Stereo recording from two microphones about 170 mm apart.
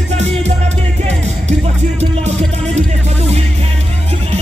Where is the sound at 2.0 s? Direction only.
40° right (ahead or behind).